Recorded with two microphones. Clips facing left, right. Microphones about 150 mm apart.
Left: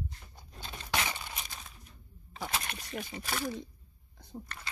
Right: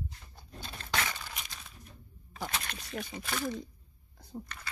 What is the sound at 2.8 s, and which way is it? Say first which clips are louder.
Speech: even; centre (ahead or behind).